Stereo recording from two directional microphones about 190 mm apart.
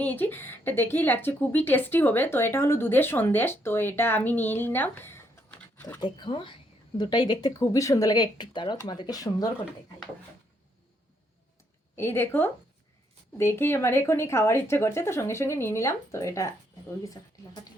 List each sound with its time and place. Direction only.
0.0 s speech: 10° left (ahead or behind)
6.0 s a woman's voice: 25° left (ahead or behind)
11.9 s speech: 10° left (ahead or behind)